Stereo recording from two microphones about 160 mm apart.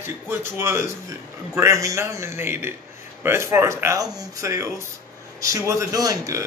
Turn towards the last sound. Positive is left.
turn(degrees=-20)  # may be behind; listen again after turning